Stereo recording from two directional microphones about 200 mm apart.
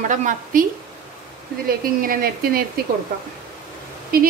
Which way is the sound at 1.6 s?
45° right (ahead or behind).